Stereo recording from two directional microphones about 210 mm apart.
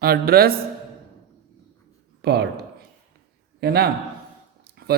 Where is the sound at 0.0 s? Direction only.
45° right (ahead or behind).